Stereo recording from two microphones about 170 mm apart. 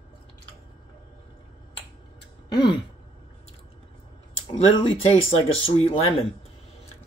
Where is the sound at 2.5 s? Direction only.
25° left (ahead or behind).